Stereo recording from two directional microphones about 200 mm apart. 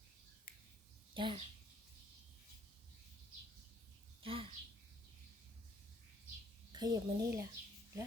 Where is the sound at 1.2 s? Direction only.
25° right (ahead or behind).